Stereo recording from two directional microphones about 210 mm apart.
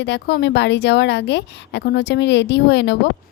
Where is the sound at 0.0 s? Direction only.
55° left (ahead or behind).